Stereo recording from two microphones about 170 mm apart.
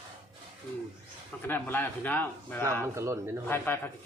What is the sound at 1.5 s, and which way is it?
A man's voice, 10° left (ahead or behind).